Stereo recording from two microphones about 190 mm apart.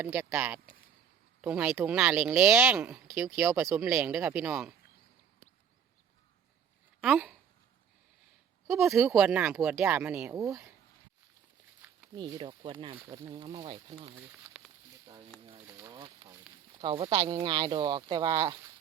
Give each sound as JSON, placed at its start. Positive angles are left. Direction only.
{"t": 0.0, "sound": "speech", "side_deg": -10}
{"t": 7.0, "sound": "speech", "side_deg": 0}
{"t": 8.9, "sound": "speech", "side_deg": 0}
{"t": 12.1, "sound": "speech", "side_deg": -25}
{"t": 14.2, "sound": "speech", "side_deg": -10}
{"t": 15.0, "sound": "a sound", "side_deg": -20}
{"t": 15.9, "sound": "speech", "side_deg": -25}